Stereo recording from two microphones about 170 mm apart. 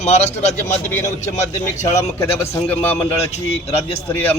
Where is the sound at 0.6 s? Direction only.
15° left (ahead or behind).